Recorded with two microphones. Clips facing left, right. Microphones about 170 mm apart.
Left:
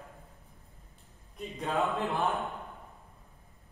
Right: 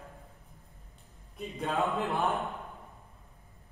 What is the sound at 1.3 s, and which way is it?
A man's voice, centre (ahead or behind).